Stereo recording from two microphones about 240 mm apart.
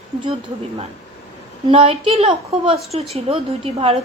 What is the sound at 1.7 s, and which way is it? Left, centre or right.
A woman's voice, right.